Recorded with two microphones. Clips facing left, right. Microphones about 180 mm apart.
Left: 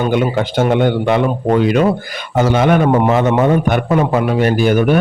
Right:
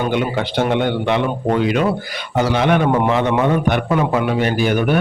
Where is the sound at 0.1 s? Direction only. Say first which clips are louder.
Left 4 dB; 45° left (ahead or behind).